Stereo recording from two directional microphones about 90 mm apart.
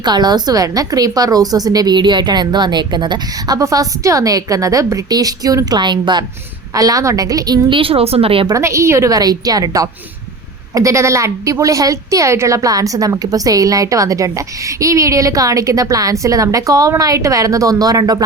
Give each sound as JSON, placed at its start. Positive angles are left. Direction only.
{"t": 0.0, "sound": "a woman's voice", "side_deg": -50}
{"t": 6.7, "sound": "a woman's voice", "side_deg": -40}
{"t": 7.7, "sound": "speech", "side_deg": -85}
{"t": 8.5, "sound": "a woman's voice", "side_deg": -30}